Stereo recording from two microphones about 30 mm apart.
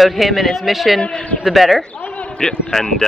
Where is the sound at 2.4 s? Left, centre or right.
Left.